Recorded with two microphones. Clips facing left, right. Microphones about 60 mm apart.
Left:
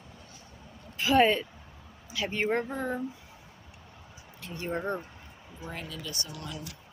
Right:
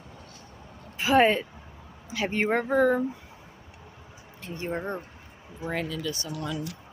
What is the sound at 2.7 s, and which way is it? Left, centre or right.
Speech, right.